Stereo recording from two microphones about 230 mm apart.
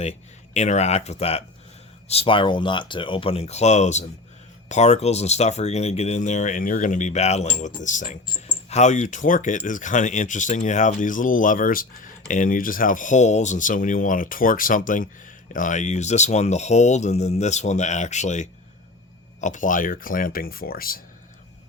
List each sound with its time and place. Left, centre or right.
0.0 s speech: left